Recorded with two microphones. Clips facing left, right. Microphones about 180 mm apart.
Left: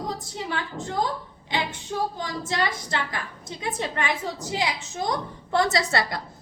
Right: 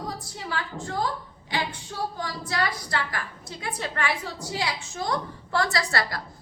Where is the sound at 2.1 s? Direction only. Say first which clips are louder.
Left 2 dB; 20° left (ahead or behind).